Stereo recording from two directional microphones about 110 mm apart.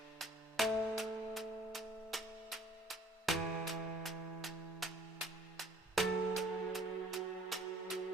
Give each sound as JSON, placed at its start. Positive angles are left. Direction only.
{"t": 0.2, "sound": "music", "side_deg": 0}